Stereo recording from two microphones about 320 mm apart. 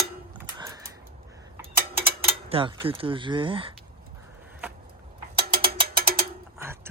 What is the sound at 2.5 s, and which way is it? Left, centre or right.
Speech, centre.